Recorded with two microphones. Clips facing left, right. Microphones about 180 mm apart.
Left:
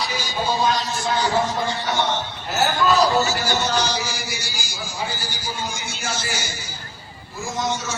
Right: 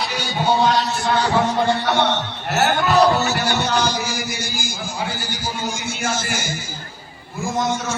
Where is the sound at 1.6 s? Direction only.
60° right (ahead or behind).